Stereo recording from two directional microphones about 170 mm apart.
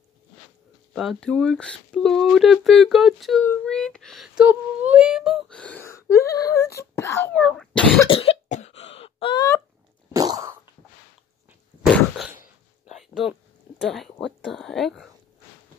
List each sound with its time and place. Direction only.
0.9 s speech: centre (ahead or behind)
4.5 s whimper: 10° right (ahead or behind); by 7.3 s 15° left (ahead or behind)
7.3 s cough: centre (ahead or behind)
8.1 s cough: 35° left (ahead or behind)
10.1 s cough: 20° right (ahead or behind)
12.8 s a sound: centre (ahead or behind)
14.2 s speech: centre (ahead or behind)